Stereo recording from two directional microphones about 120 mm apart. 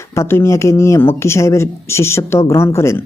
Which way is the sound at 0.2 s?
20° left (ahead or behind).